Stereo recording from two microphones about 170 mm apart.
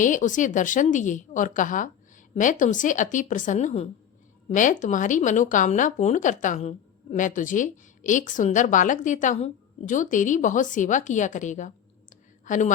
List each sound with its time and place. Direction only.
0.0 s speech: 50° left (ahead or behind)